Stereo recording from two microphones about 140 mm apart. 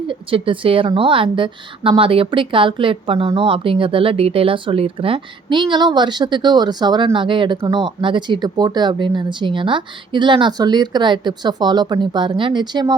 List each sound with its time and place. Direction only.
0.1 s a woman's voice: 40° right (ahead or behind)